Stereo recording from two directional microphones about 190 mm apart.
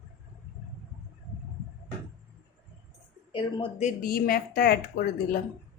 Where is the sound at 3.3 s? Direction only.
30° left (ahead or behind); by 5.4 s 55° left (ahead or behind).